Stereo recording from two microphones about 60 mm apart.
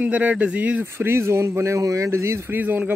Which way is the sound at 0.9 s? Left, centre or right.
Right.